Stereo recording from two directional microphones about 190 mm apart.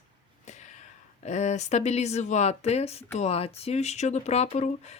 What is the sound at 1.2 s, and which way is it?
Speech, 35° left (ahead or behind).